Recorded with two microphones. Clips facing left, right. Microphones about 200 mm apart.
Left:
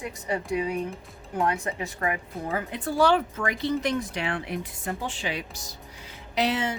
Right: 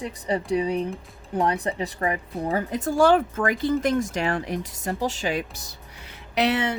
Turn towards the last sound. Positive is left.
turn(degrees=-65)  # may be behind; listen again after turning